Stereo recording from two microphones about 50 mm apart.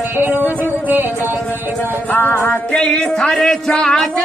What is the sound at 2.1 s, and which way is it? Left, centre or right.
Music, left.